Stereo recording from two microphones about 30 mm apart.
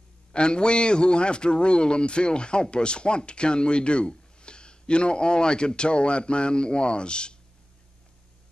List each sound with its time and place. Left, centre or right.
0.3 s a man's voice: left